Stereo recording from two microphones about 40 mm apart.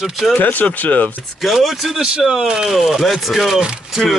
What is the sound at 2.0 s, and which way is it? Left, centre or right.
Speech, centre.